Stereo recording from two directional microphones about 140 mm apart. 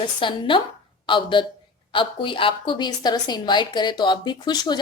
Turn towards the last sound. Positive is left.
turn(degrees=30)  # may be behind; listen again after turning